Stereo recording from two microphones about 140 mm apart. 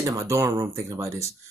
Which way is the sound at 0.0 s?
25° right (ahead or behind).